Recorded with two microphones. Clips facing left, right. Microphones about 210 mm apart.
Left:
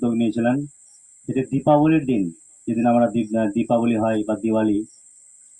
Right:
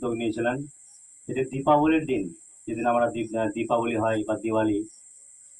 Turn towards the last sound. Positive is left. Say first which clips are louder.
# left 5 dB
turn(degrees=40)  # may be behind; listen again after turning